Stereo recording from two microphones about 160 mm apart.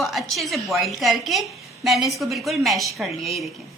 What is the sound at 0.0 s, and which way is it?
A woman's voice, centre (ahead or behind).